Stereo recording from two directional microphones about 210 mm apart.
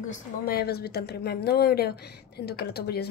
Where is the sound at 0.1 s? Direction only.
45° left (ahead or behind).